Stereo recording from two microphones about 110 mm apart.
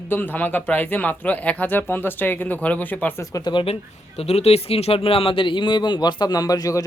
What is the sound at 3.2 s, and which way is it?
Speech, 35° left (ahead or behind).